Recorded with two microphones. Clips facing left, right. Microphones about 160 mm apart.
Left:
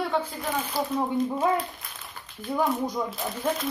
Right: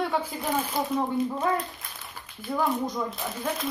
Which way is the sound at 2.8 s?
10° left (ahead or behind).